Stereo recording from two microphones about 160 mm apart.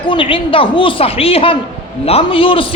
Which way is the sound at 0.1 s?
35° left (ahead or behind).